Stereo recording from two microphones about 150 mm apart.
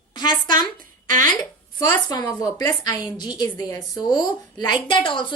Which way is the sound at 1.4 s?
25° left (ahead or behind).